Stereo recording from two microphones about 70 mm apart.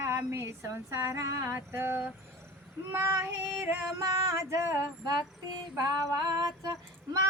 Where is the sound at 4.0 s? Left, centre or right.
Right.